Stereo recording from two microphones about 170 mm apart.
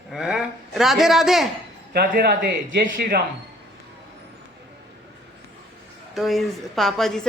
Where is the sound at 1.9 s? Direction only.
65° right (ahead or behind).